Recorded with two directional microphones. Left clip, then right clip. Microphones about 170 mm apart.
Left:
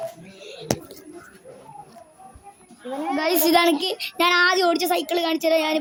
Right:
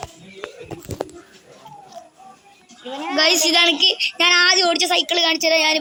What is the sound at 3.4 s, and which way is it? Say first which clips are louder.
Speech: right 2 dB; 45° left (ahead or behind).